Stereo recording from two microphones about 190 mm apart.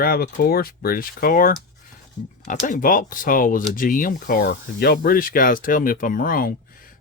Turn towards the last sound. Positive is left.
turn(degrees=45)  # may be behind; listen again after turning